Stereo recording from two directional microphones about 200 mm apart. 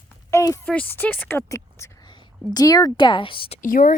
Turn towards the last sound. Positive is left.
turn(degrees=40)  # may be behind; listen again after turning